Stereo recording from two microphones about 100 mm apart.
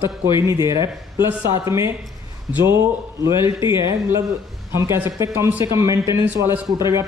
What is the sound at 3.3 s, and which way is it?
Speech, 30° right (ahead or behind).